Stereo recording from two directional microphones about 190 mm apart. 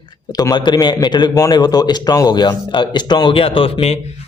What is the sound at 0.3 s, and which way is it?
A man's voice, 20° left (ahead or behind).